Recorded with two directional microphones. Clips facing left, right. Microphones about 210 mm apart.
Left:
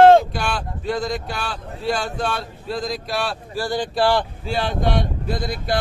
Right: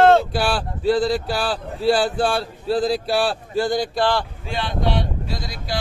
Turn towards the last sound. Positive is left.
turn(degrees=55)  # may be behind; listen again after turning